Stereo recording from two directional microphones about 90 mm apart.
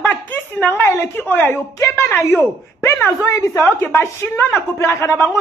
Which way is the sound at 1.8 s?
30° left (ahead or behind).